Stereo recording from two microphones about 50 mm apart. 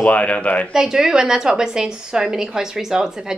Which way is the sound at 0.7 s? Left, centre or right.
Centre.